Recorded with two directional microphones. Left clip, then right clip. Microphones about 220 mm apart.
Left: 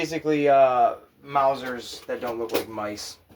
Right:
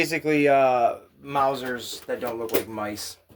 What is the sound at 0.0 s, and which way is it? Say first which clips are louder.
Speech: right 1 dB; 35° right (ahead or behind).